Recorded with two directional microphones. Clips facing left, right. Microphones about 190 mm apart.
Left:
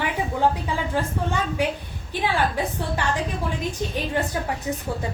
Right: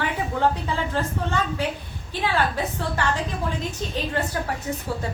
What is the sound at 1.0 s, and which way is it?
A woman's voice, 15° left (ahead or behind).